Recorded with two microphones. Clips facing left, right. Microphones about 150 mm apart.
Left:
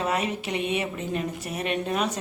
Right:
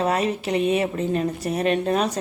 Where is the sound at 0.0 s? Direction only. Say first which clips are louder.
Right 5 dB; 35° right (ahead or behind).